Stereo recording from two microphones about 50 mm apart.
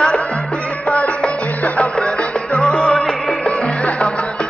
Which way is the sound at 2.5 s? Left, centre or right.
Left.